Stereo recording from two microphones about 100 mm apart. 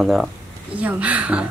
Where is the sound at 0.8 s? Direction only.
15° right (ahead or behind).